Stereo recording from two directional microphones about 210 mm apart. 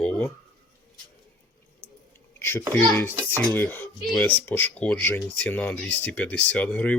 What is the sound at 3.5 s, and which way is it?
Cutlery, 10° left (ahead or behind).